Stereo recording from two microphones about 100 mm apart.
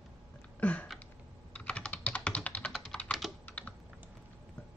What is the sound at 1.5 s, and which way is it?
Computer keyboard, 15° left (ahead or behind).